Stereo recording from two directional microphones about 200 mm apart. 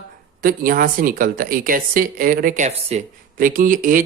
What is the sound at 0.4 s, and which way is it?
Speech, 45° right (ahead or behind).